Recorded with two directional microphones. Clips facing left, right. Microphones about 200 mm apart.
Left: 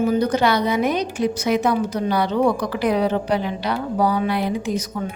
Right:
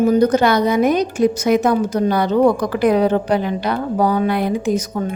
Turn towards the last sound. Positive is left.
turn(degrees=-50)  # may be behind; listen again after turning